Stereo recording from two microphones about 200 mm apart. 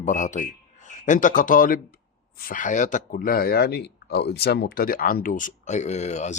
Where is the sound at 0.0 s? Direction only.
40° left (ahead or behind).